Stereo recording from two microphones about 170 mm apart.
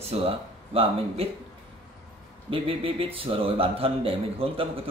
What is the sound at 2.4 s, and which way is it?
A man's voice, 30° right (ahead or behind).